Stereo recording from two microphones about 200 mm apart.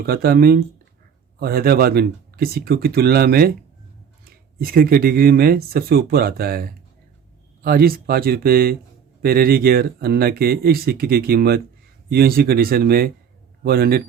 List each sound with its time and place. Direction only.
0.0 s speech: 50° right (ahead or behind)